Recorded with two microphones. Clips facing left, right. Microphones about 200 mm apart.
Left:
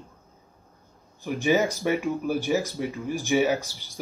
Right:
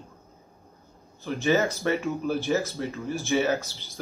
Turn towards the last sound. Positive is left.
turn(degrees=10)  # may be behind; listen again after turning